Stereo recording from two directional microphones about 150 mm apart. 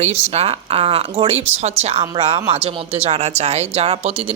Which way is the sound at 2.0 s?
35° right (ahead or behind).